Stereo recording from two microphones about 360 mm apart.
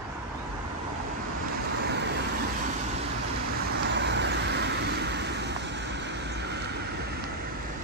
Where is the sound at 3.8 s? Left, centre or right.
Right.